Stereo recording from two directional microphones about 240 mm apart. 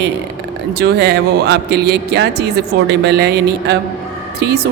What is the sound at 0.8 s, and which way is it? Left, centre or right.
A woman's voice, right.